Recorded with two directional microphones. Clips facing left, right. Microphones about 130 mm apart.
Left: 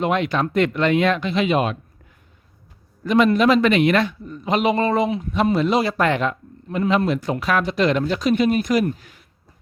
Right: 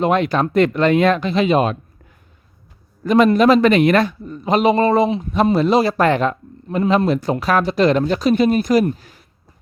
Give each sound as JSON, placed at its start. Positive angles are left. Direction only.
{"t": 0.0, "sound": "a man's voice", "side_deg": -40}
{"t": 3.0, "sound": "a man's voice", "side_deg": -40}